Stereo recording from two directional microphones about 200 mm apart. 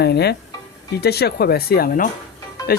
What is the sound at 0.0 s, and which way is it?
Speech, 55° left (ahead or behind).